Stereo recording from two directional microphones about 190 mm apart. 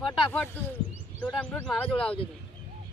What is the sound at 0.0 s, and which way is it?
Speech, 5° left (ahead or behind).